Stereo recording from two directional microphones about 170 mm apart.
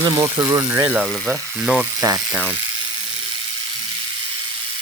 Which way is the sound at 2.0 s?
20° right (ahead or behind).